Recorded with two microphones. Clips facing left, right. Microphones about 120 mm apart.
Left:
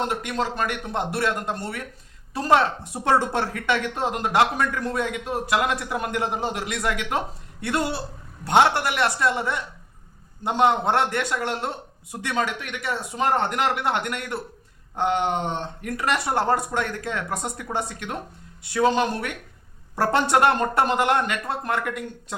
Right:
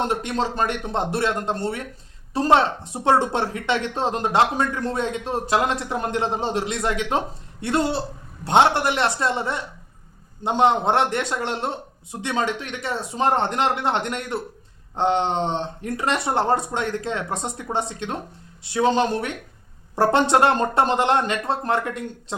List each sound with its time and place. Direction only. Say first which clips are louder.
0.0 s a woman's voice: right 2 dB; 25° right (ahead or behind)